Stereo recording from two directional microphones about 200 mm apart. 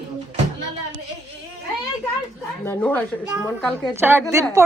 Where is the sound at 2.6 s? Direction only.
10° left (ahead or behind).